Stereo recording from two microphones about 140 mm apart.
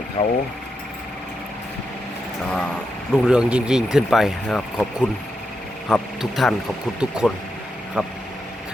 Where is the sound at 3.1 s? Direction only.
5° right (ahead or behind).